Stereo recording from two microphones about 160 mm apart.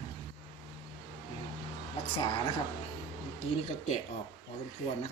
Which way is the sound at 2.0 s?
25° left (ahead or behind).